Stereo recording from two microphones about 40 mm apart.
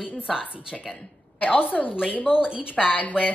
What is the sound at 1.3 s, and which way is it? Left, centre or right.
Speech, left.